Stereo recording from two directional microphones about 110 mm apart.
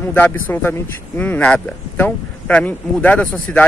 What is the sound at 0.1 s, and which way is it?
Speech, 15° left (ahead or behind).